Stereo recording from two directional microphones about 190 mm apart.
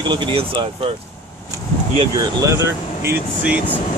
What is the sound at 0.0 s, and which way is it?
Speech, 25° right (ahead or behind).